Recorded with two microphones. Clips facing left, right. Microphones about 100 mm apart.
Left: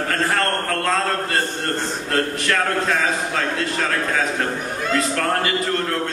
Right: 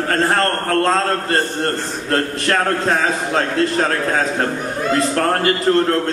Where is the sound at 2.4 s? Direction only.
35° right (ahead or behind).